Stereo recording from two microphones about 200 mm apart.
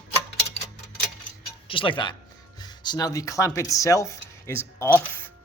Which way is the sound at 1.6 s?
25° left (ahead or behind).